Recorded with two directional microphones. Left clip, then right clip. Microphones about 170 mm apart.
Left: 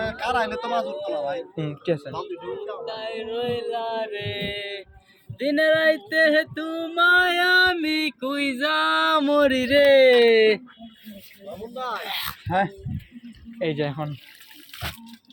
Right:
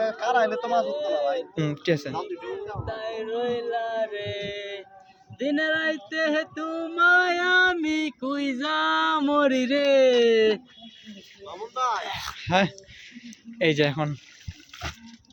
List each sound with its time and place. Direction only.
0.0 s a sound: 20° left (ahead or behind)
0.8 s speech: 25° left (ahead or behind)
2.1 s speech: 10° left (ahead or behind)
8.2 s speech: 5° right (ahead or behind)
11.9 s a sound: centre (ahead or behind)
12.5 s speech: 45° right (ahead or behind)
14.7 s water: 5° left (ahead or behind)